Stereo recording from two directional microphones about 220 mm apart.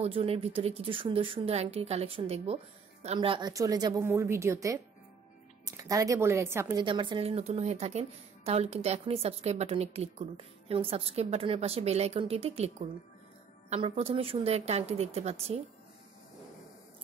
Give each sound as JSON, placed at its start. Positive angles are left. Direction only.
{"t": 0.0, "sound": "speech", "side_deg": -25}
{"t": 5.8, "sound": "speech", "side_deg": -15}